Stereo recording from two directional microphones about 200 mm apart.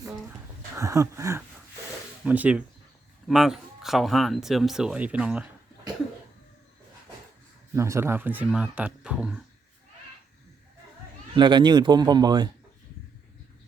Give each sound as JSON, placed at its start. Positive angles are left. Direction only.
{"t": 0.8, "sound": "speech", "side_deg": -15}
{"t": 7.8, "sound": "speech", "side_deg": -15}
{"t": 11.3, "sound": "speech", "side_deg": -20}